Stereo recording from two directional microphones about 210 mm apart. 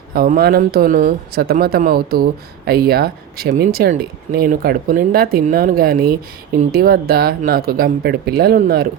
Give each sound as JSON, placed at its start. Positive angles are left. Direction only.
{"t": 0.1, "sound": "speech", "side_deg": -45}